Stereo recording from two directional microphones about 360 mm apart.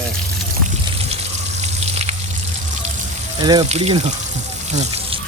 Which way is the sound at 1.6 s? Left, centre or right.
Centre.